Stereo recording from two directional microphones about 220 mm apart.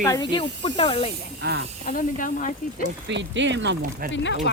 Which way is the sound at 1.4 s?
50° right (ahead or behind).